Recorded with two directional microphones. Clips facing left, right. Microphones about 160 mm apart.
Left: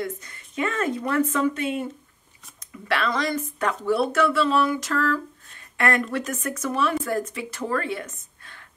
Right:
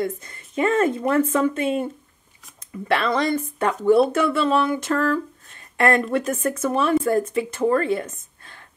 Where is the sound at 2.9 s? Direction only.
25° right (ahead or behind).